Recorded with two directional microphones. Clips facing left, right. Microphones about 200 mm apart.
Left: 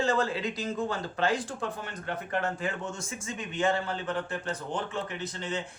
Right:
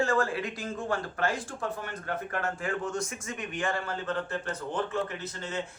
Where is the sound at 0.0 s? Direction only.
20° left (ahead or behind).